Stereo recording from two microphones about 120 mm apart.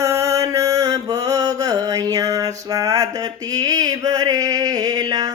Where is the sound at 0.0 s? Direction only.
25° right (ahead or behind).